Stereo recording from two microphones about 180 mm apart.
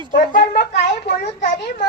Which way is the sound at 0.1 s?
55° left (ahead or behind).